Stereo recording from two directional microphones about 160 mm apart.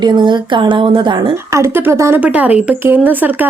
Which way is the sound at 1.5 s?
15° right (ahead or behind).